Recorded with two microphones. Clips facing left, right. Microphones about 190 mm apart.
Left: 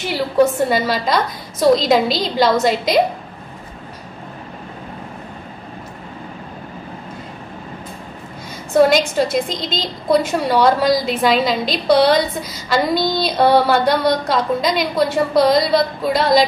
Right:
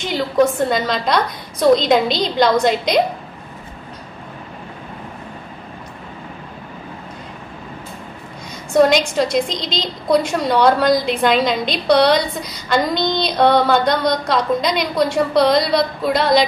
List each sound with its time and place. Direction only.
0.0 s a woman's voice: 5° left (ahead or behind)
8.7 s a woman's voice: 5° left (ahead or behind)